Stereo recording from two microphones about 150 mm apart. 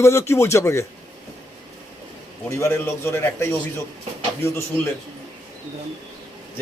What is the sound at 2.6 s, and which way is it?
Speech, 15° left (ahead or behind).